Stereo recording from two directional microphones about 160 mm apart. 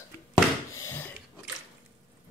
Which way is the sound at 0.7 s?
15° left (ahead or behind).